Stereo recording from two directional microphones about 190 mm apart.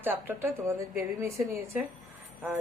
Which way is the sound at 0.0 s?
10° right (ahead or behind).